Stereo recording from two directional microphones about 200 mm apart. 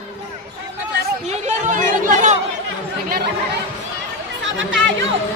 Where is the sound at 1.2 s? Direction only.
35° right (ahead or behind).